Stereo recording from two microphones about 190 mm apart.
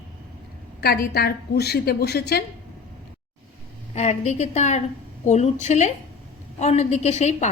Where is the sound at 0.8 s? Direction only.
55° left (ahead or behind).